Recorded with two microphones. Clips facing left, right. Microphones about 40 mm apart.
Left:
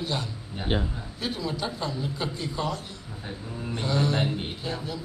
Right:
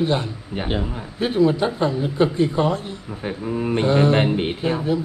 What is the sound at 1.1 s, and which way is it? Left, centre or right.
A man's voice, right.